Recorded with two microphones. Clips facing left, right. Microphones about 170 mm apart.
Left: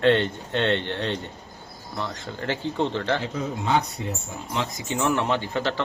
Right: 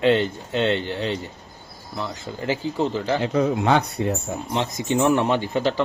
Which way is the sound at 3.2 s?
70° right (ahead or behind).